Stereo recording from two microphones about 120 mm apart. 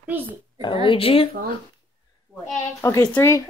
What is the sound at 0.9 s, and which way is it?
Speech, 50° left (ahead or behind).